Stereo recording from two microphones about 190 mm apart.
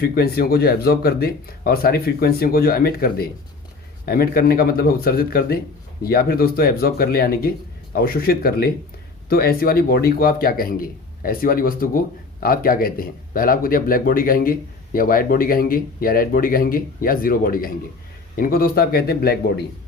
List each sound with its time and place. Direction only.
0.0 s a man's voice: 55° left (ahead or behind)